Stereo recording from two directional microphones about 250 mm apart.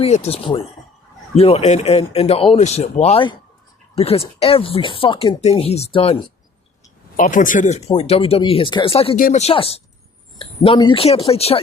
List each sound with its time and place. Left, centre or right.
0.0 s speech: left
7.2 s speech: left